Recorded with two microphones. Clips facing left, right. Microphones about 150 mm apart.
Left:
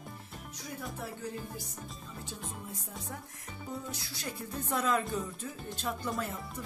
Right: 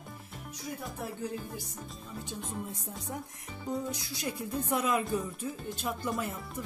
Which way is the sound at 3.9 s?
15° right (ahead or behind).